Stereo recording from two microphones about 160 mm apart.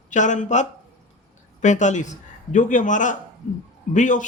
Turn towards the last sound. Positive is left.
turn(degrees=50)  # may be behind; listen again after turning